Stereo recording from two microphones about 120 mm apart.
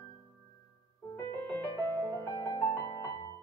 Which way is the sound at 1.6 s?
25° left (ahead or behind).